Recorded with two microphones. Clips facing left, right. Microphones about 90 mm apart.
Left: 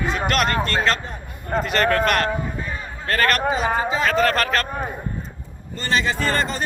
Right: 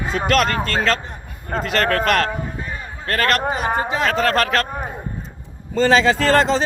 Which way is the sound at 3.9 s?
70° right (ahead or behind).